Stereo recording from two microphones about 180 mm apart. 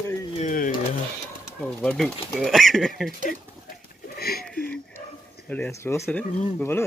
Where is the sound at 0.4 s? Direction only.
50° left (ahead or behind).